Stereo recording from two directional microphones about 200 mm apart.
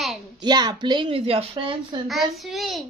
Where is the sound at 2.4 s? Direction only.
Centre (ahead or behind).